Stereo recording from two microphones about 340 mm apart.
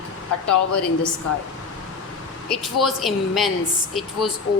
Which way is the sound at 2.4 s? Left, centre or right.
Centre.